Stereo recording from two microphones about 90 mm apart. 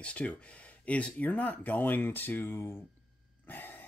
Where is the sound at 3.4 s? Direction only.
20° left (ahead or behind).